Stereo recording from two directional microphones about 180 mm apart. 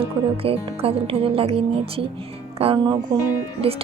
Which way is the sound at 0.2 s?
30° right (ahead or behind).